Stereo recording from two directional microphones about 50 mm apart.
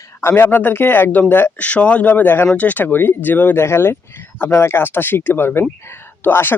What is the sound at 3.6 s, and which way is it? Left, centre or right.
Speech, left.